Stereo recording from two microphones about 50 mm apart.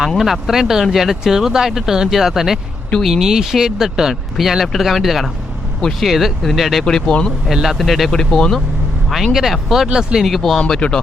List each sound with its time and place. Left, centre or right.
0.2 s speech: centre
6.8 s speech: centre
7.5 s speech: centre
8.1 s speech: centre
9.0 s speech: centre
9.9 s speech: centre
10.2 s speech: centre
10.6 s speech: centre